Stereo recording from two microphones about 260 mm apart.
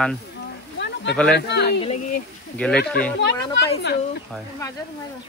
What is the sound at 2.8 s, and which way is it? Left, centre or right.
Speech, left.